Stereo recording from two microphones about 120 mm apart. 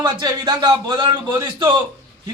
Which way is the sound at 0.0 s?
35° right (ahead or behind).